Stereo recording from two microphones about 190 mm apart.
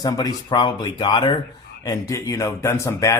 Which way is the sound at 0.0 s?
20° left (ahead or behind).